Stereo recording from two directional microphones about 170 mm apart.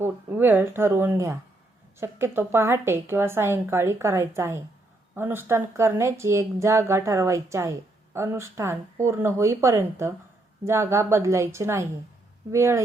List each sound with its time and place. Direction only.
0.0 s speech: 10° right (ahead or behind)